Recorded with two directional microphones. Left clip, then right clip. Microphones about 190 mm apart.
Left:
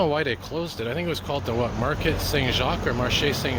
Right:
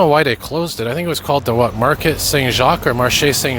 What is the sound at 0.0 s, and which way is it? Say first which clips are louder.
Speech: right 11 dB; 50° right (ahead or behind).